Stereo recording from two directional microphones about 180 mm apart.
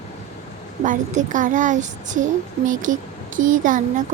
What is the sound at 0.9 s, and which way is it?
A child's voice, 45° right (ahead or behind).